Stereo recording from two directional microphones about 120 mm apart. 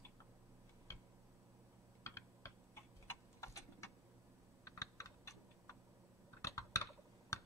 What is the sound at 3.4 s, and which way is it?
Tick-tock, 25° left (ahead or behind).